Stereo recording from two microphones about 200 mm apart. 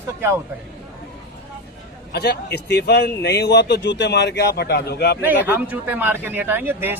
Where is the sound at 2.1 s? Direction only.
55° left (ahead or behind).